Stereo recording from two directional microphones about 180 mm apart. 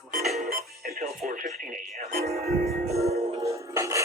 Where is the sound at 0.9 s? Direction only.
35° right (ahead or behind).